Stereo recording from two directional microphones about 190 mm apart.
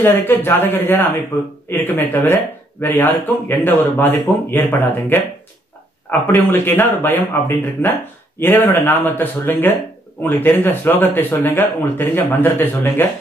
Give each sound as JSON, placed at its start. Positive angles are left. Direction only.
{"t": 0.0, "sound": "speech", "side_deg": 10}